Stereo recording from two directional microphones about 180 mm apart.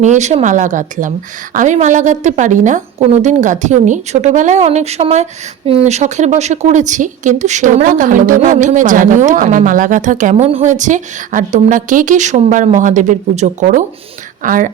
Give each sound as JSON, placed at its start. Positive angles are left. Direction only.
{"t": 0.0, "sound": "a woman's voice", "side_deg": -40}